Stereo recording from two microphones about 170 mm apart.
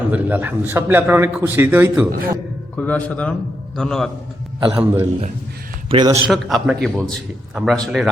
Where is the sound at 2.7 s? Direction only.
10° left (ahead or behind).